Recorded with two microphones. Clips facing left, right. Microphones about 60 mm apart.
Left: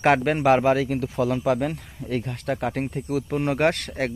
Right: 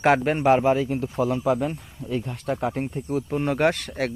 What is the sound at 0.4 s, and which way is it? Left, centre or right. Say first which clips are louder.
Speech: even; left.